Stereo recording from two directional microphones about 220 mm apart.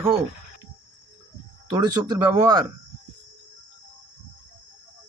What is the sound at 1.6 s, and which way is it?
Speech, 20° right (ahead or behind).